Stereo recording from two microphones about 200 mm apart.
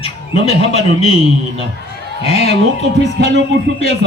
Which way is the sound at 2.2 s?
30° left (ahead or behind).